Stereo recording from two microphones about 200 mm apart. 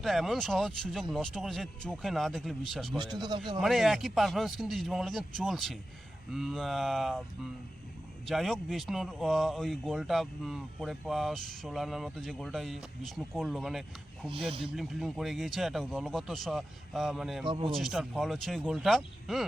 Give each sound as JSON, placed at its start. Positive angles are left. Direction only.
{"t": 0.0, "sound": "a man's voice", "side_deg": 0}
{"t": 3.0, "sound": "speech", "side_deg": -20}
{"t": 3.6, "sound": "a man's voice", "side_deg": 0}
{"t": 8.3, "sound": "a man's voice", "side_deg": 0}
{"t": 17.4, "sound": "speech", "side_deg": -25}
{"t": 17.7, "sound": "a man's voice", "side_deg": 0}